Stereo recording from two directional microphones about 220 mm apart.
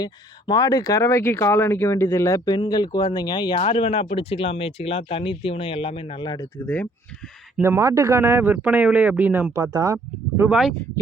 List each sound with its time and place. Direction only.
0.0 s speech: 20° left (ahead or behind)
7.6 s speech: 10° right (ahead or behind)